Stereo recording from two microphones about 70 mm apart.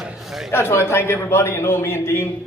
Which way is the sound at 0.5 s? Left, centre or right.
Left.